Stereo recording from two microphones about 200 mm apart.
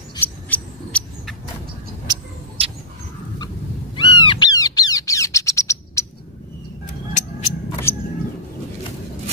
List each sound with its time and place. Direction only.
0.5 s rodents: 5° left (ahead or behind)
2.0 s rodents: 30° right (ahead or behind)
3.9 s bird: 25° left (ahead or behind)
7.2 s a sound: 35° left (ahead or behind)